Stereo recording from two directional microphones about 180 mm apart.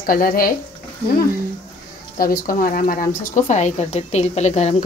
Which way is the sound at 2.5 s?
50° left (ahead or behind).